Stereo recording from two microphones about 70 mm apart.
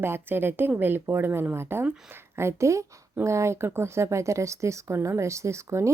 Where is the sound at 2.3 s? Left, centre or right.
Right.